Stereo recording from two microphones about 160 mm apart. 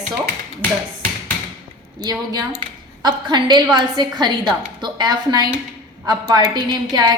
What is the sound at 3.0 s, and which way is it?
A woman's voice, 25° right (ahead or behind).